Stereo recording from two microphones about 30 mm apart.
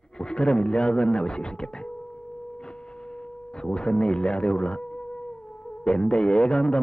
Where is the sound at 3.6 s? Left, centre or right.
Left.